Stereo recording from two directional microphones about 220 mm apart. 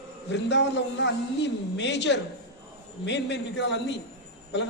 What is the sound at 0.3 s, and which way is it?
A woman's voice, 50° left (ahead or behind).